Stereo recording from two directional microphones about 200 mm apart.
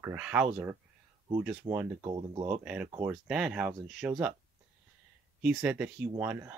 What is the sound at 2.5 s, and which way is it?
Speech, 5° right (ahead or behind).